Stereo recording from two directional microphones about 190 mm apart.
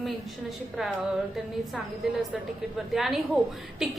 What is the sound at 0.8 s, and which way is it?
Speech, 5° right (ahead or behind).